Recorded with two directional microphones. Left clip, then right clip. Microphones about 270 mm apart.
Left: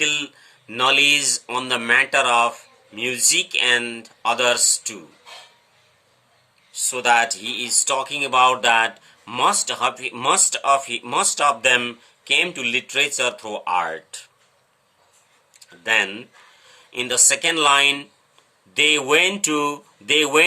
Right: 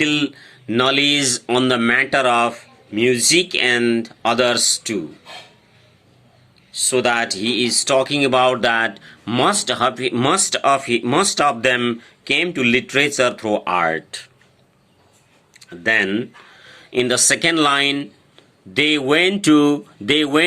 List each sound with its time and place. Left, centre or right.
0.0 s speech: centre
4.6 s speech: right
6.7 s speech: centre
7.6 s speech: right
8.0 s speech: centre
11.2 s speech: right
11.4 s speech: centre
11.8 s speech: right
13.4 s speech: centre
15.8 s speech: centre
17.1 s speech: centre